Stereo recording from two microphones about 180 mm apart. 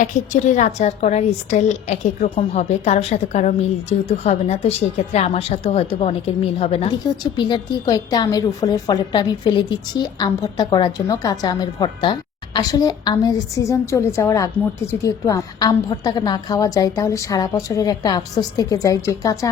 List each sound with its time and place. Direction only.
0.0 s a woman's voice: 45° left (ahead or behind); by 19.5 s 20° left (ahead or behind)